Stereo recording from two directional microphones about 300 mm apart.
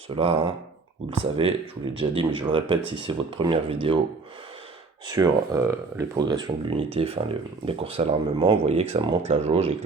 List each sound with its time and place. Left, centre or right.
0.1 s speech: centre
5.0 s speech: centre